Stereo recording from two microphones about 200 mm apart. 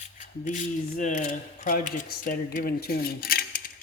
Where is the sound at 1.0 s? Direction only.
40° left (ahead or behind).